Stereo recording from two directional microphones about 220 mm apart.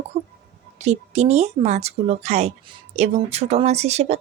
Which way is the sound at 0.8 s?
30° right (ahead or behind).